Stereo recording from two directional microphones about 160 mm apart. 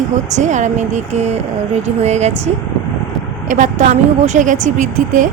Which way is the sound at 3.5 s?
50° right (ahead or behind).